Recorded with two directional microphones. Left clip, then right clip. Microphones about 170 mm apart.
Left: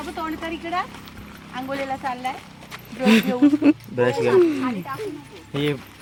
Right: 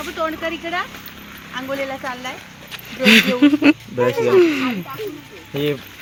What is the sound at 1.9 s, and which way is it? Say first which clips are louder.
Speech: left 1 dB; 40° left (ahead or behind).